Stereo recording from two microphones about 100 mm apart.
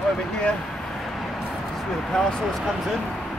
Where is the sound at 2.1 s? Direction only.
5° left (ahead or behind).